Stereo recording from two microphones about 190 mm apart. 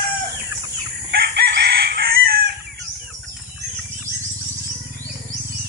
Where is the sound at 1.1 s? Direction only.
60° right (ahead or behind).